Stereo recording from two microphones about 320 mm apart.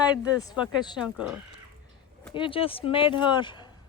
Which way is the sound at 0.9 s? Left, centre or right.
Centre.